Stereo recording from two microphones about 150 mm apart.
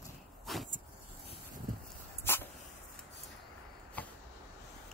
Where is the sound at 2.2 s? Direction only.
15° left (ahead or behind).